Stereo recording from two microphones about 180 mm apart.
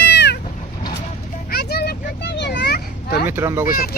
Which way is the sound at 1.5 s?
65° left (ahead or behind).